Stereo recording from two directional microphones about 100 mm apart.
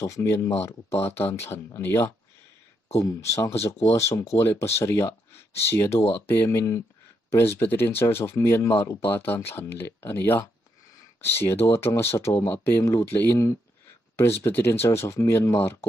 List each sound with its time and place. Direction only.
0.0 s speech: 30° left (ahead or behind)
2.9 s speech: 35° left (ahead or behind)
3.5 s speech: 90° left
3.8 s speech: 30° left (ahead or behind)